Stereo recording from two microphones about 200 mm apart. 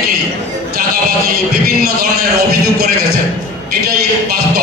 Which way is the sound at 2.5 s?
50° right (ahead or behind).